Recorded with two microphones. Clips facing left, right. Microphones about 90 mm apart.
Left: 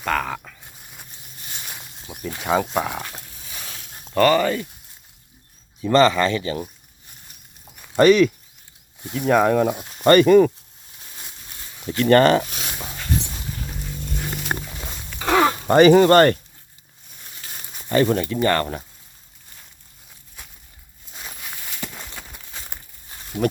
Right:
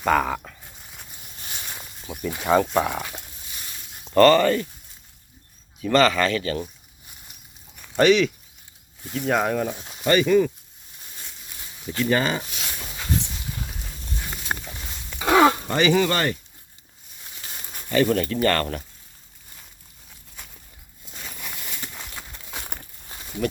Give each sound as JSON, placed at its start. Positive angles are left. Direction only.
{"t": 0.0, "sound": "speech", "side_deg": -5}
{"t": 2.2, "sound": "speech", "side_deg": -5}
{"t": 3.6, "sound": "a sound", "side_deg": 90}
{"t": 4.0, "sound": "a sound", "side_deg": 0}
{"t": 4.3, "sound": "speech", "side_deg": 10}
{"t": 5.9, "sound": "speech", "side_deg": 30}
{"t": 7.9, "sound": "speech", "side_deg": 45}
{"t": 11.9, "sound": "speech", "side_deg": 60}
{"t": 14.5, "sound": "wild animals", "side_deg": 15}
{"t": 15.2, "sound": "a sound", "side_deg": -20}
{"t": 15.6, "sound": "speech", "side_deg": 45}
{"t": 18.0, "sound": "speech", "side_deg": 20}